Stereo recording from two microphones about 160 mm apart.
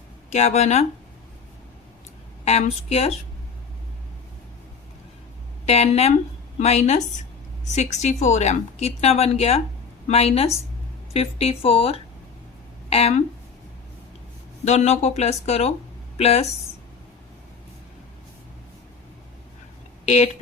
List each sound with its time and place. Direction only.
0.3 s speech: 45° left (ahead or behind)
2.4 s speech: 40° left (ahead or behind)
5.6 s speech: 40° left (ahead or behind)
14.6 s speech: 45° left (ahead or behind)
20.1 s speech: 45° left (ahead or behind)